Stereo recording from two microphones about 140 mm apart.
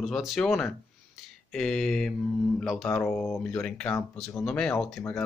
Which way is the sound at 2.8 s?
15° left (ahead or behind).